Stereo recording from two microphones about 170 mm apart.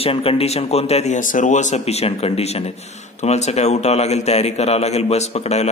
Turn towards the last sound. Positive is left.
turn(degrees=40)  # may be behind; listen again after turning